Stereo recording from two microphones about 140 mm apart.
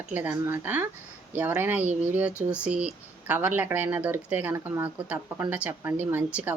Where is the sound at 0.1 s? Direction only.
10° right (ahead or behind).